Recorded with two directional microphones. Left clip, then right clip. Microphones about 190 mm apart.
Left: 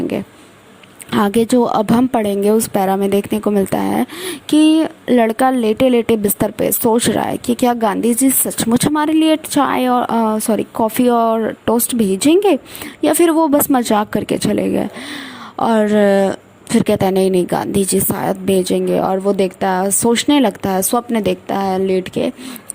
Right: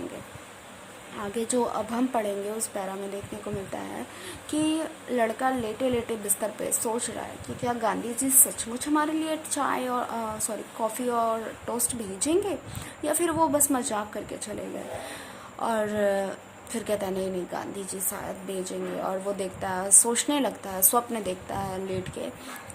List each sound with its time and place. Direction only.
1.1 s a woman's voice: 50° left (ahead or behind)